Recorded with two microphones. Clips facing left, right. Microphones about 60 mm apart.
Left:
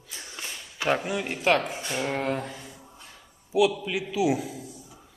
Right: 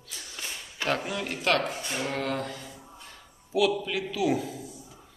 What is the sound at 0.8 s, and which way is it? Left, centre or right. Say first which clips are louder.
A man's voice: left 3 dB; centre.